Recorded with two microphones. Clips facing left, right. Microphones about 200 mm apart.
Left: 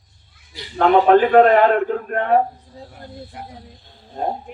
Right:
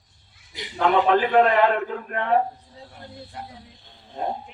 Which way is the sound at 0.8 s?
45° left (ahead or behind).